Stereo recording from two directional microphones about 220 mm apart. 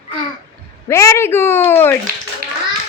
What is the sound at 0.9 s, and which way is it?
A woman's voice, 15° left (ahead or behind).